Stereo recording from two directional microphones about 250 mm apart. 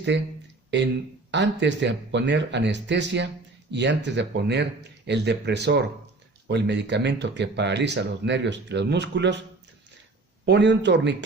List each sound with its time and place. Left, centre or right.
0.1 s speech: right
1.3 s speech: right
10.4 s speech: right